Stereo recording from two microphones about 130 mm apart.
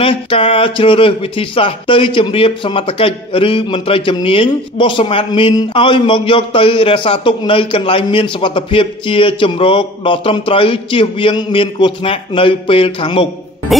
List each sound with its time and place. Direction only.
0.0 s speech: 45° left (ahead or behind)